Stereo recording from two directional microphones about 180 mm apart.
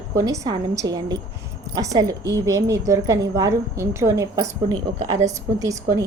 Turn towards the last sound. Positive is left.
turn(degrees=-20)  # may be behind; listen again after turning